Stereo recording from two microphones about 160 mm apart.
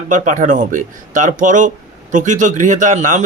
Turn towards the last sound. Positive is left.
turn(degrees=-50)  # may be behind; listen again after turning